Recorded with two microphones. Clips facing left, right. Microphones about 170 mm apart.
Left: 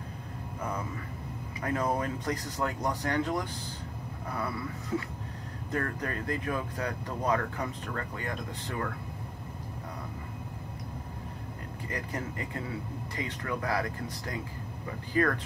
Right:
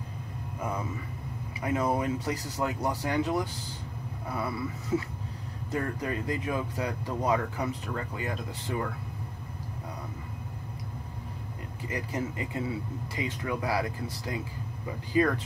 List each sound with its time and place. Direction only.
1.6 s speech: 10° right (ahead or behind)
4.9 s a sound: 20° right (ahead or behind)
5.7 s speech: 15° right (ahead or behind)
11.9 s speech: 15° right (ahead or behind)